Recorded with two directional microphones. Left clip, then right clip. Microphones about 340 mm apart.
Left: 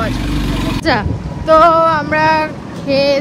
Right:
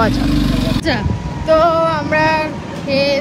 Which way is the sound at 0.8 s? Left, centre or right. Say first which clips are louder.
Left 4 dB; centre.